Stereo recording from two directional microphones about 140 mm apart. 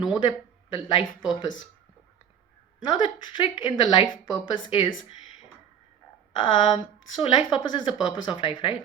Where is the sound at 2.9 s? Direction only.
35° left (ahead or behind).